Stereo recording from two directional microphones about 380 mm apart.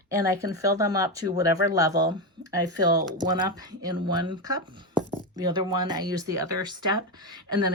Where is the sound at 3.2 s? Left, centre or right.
Centre.